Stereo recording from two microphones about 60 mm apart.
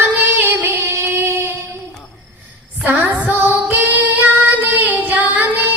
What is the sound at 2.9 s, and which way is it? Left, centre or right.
Child singing, right.